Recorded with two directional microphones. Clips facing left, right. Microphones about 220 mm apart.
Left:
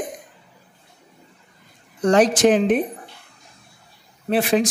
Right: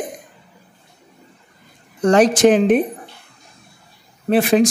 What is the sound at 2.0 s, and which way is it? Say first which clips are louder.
Speech: right 3 dB; 60° right (ahead or behind).